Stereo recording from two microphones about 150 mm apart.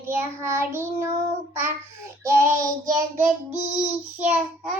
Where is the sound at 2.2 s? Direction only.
20° right (ahead or behind).